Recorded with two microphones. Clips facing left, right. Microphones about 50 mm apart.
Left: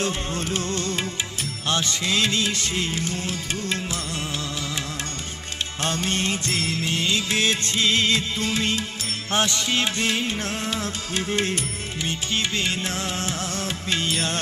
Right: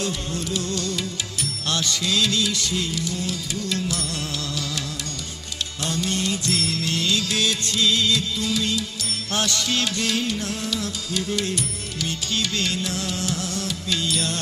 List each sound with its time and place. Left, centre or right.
0.0 s music: left
5.8 s music: left